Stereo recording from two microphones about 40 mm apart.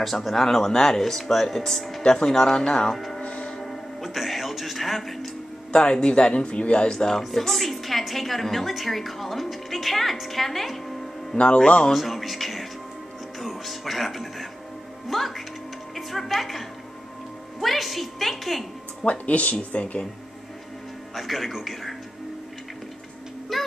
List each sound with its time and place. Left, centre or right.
0.0 s a woman's voice: centre
2.0 s speech: centre
2.9 s speech: centre
3.2 s music: left
4.0 s a woman's voice: centre
5.7 s speech: left
7.2 s a woman's voice: centre
11.3 s speech: left
11.9 s a woman's voice: centre
19.0 s speech: left
21.1 s a woman's voice: centre
23.5 s a woman's voice: centre